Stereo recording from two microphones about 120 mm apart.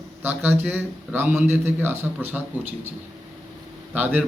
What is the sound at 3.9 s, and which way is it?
Speech, 15° right (ahead or behind).